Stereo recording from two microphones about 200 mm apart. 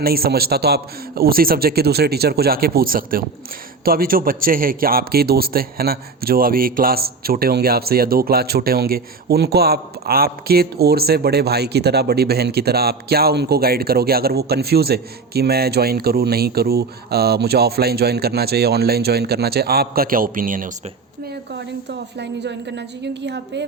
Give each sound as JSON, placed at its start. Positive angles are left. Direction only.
{"t": 0.0, "sound": "a man's voice", "side_deg": -50}
{"t": 21.8, "sound": "a woman's voice", "side_deg": -60}